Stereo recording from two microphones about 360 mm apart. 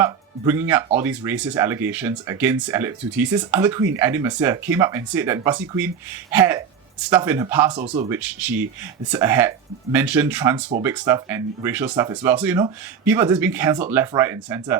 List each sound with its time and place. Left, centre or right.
0.0 s speech: centre
8.2 s speech: centre